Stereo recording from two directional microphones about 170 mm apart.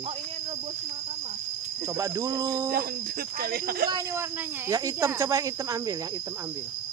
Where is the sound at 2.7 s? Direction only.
60° right (ahead or behind).